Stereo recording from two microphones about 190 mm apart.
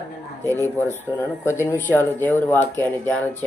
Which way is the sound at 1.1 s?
10° left (ahead or behind).